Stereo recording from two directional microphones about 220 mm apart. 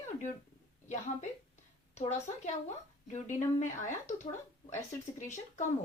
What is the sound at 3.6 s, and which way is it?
A woman's voice, 30° left (ahead or behind).